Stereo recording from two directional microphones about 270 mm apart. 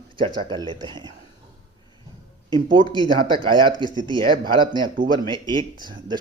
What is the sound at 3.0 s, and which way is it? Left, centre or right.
Speech, centre.